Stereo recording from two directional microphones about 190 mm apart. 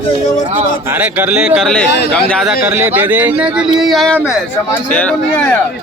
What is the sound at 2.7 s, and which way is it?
Speech, 10° right (ahead or behind).